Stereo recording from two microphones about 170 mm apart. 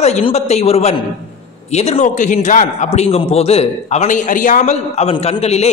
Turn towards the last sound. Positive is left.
turn(degrees=40)  # may be behind; listen again after turning